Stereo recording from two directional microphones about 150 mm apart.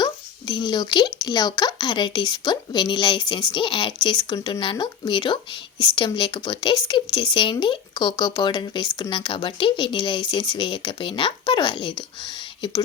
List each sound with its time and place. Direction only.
0.0 s speech: 30° left (ahead or behind)